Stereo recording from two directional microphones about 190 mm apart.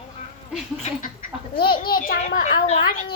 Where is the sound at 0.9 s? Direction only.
35° left (ahead or behind).